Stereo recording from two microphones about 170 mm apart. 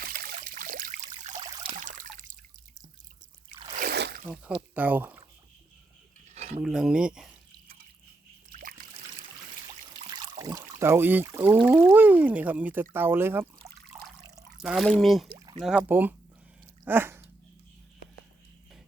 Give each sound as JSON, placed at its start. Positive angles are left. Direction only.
{"t": 0.0, "sound": "trickle", "side_deg": -65}
{"t": 1.4, "sound": "trickle", "side_deg": -25}
{"t": 1.8, "sound": "water", "side_deg": -50}
{"t": 3.5, "sound": "a sound", "side_deg": -25}
{"t": 3.8, "sound": "a sound", "side_deg": -70}
{"t": 4.7, "sound": "speech", "side_deg": -10}
{"t": 6.2, "sound": "cutlery", "side_deg": -40}
{"t": 6.6, "sound": "speech", "side_deg": -5}
{"t": 8.4, "sound": "a sound", "side_deg": -55}
{"t": 10.3, "sound": "speech", "side_deg": -20}
{"t": 14.6, "sound": "speech", "side_deg": 0}
{"t": 15.4, "sound": "a sound", "side_deg": -25}
{"t": 15.8, "sound": "speech", "side_deg": -10}
{"t": 16.8, "sound": "dog", "side_deg": -15}